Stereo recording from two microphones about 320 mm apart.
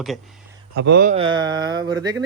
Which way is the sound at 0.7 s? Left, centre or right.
Right.